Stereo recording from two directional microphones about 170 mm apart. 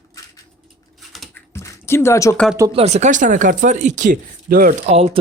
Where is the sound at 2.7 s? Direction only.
40° right (ahead or behind); by 4.8 s 55° right (ahead or behind).